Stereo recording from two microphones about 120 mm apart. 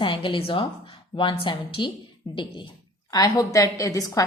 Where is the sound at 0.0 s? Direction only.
45° left (ahead or behind).